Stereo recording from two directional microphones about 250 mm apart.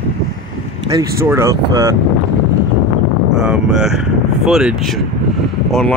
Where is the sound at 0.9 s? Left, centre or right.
Centre.